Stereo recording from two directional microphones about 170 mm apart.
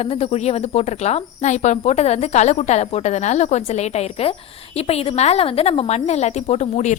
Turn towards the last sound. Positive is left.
turn(degrees=40)  # may be behind; listen again after turning